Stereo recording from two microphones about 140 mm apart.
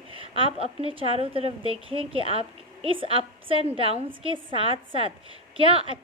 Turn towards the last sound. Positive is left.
turn(degrees=-40)  # may be behind; listen again after turning